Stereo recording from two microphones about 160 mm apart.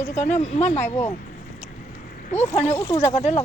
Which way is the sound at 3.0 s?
45° left (ahead or behind).